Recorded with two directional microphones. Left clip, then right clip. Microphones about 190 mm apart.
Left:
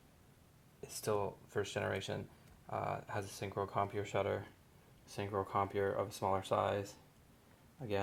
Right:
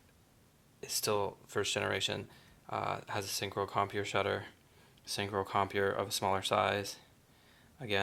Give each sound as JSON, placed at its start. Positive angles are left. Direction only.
{"t": 0.8, "sound": "speech", "side_deg": -20}